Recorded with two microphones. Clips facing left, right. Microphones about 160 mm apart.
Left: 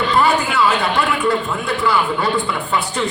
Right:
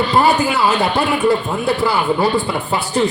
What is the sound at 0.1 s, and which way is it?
A man's voice, 35° right (ahead or behind).